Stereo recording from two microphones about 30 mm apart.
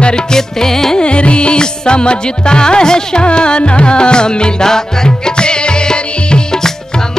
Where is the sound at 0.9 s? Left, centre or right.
Left.